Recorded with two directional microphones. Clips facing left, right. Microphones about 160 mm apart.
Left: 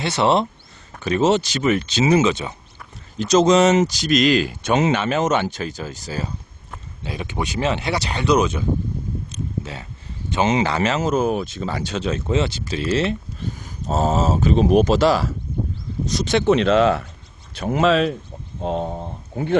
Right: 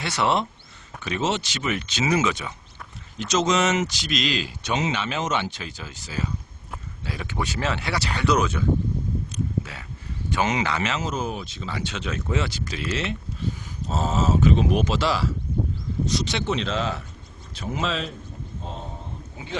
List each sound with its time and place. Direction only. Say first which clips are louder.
0.0 s speech: left 5 dB; 25° left (ahead or behind)
1.0 s speech: left 8 dB; 40° left (ahead or behind)
7.0 s speech: left 3 dB; 20° left (ahead or behind)
9.3 s a sound: even; 25° left (ahead or behind)
10.2 s speech: left 5 dB; 25° left (ahead or behind); by 18.9 s 70° left (ahead or behind)